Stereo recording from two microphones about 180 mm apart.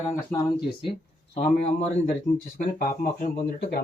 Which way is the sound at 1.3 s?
35° left (ahead or behind).